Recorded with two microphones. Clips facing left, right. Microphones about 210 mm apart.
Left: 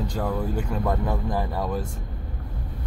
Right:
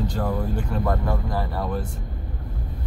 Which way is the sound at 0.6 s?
15° left (ahead or behind).